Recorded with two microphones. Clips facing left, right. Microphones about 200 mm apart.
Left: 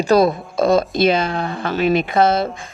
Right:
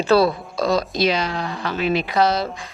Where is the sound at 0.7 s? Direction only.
50° left (ahead or behind).